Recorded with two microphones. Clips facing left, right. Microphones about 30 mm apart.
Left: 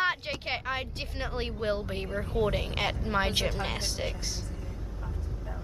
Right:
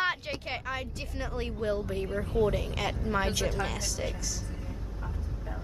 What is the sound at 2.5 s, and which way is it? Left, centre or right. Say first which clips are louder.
Speech: left 1 dB; left.